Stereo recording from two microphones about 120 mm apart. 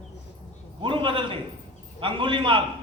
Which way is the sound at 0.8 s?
45° right (ahead or behind).